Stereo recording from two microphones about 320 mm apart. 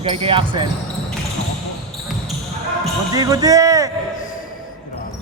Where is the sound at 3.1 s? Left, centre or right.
Centre.